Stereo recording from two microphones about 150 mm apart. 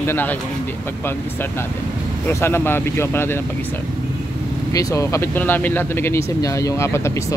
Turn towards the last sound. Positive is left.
turn(degrees=20)  # may be behind; listen again after turning